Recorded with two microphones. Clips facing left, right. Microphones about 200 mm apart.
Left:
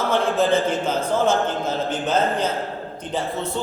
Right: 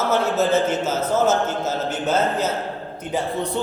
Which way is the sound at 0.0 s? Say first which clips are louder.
Even; 5° right (ahead or behind).